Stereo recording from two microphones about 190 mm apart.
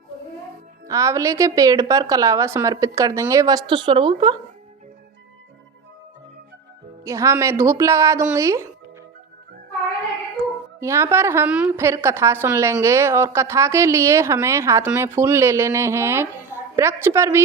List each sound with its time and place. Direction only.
0.9 s a woman's voice: 15° right (ahead or behind)
7.0 s a woman's voice: 15° right (ahead or behind)
10.8 s a woman's voice: 15° right (ahead or behind)